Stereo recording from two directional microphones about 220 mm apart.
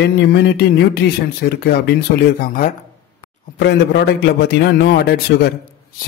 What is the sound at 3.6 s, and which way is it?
Speech, 50° left (ahead or behind).